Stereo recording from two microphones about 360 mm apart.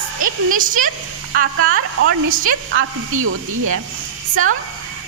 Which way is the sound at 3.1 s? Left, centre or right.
Right.